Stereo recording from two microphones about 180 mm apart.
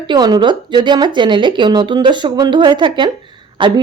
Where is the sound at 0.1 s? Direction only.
25° right (ahead or behind).